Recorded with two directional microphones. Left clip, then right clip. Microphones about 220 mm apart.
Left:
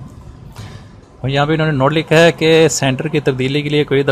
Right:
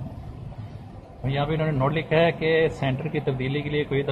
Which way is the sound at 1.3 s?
50° left (ahead or behind).